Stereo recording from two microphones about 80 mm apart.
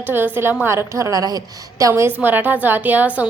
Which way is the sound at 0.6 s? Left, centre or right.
Right.